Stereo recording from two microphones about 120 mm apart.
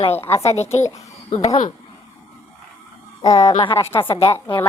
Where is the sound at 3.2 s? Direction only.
30° left (ahead or behind).